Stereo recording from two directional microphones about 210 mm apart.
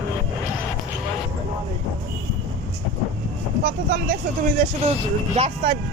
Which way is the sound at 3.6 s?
45° right (ahead or behind).